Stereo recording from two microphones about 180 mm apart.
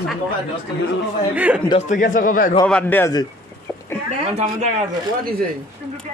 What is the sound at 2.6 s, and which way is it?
Speech, 10° left (ahead or behind).